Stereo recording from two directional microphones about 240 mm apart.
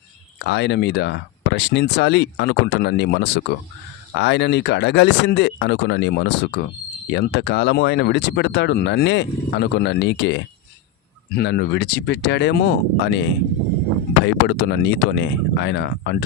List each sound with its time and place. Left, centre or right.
0.3 s speech: left
14.3 s speech: left